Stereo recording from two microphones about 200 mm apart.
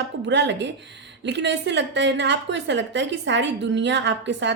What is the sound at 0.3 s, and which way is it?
A woman's voice, 60° right (ahead or behind).